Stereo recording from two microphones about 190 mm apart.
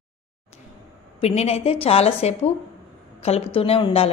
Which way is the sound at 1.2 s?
35° left (ahead or behind).